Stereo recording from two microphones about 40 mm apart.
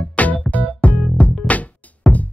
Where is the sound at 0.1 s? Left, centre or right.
Left.